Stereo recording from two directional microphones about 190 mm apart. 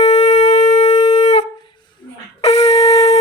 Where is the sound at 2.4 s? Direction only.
35° left (ahead or behind).